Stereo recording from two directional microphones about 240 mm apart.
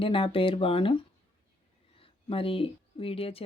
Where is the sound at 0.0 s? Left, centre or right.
Left.